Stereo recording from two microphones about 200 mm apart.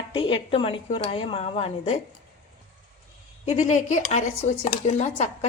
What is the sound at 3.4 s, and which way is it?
Speech, 35° left (ahead or behind).